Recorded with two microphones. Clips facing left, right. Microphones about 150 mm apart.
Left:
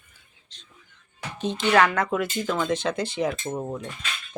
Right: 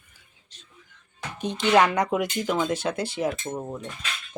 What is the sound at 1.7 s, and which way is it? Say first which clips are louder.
Speech: right 1 dB; 15° right (ahead or behind).